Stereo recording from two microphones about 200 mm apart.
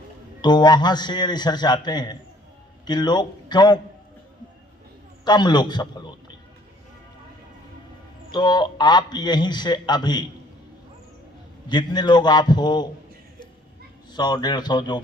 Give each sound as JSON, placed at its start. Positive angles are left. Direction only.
{"t": 0.4, "sound": "a man's voice", "side_deg": 20}
{"t": 5.2, "sound": "a man's voice", "side_deg": 20}
{"t": 8.3, "sound": "a man's voice", "side_deg": 20}
{"t": 11.7, "sound": "a man's voice", "side_deg": 20}
{"t": 14.1, "sound": "a man's voice", "side_deg": 20}